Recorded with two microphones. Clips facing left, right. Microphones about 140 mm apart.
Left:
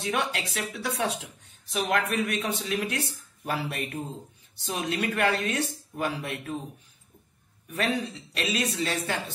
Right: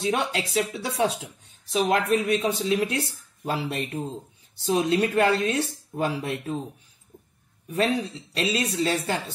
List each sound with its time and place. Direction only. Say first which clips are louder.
0.0 s speech: right 3 dB; 30° right (ahead or behind)
7.7 s speech: right 4 dB; 30° right (ahead or behind)